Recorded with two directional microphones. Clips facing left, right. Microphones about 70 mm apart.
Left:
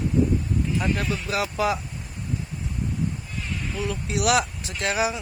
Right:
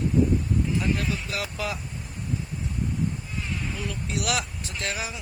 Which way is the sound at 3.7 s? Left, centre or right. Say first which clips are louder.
Left 4 dB; centre.